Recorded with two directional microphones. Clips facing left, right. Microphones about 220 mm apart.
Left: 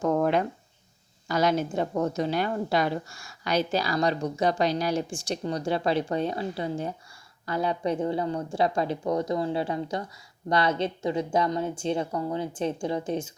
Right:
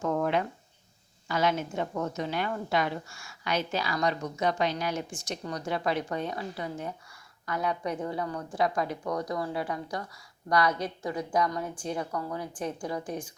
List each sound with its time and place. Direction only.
0.0 s a woman's voice: 40° left (ahead or behind); by 13.3 s 25° left (ahead or behind)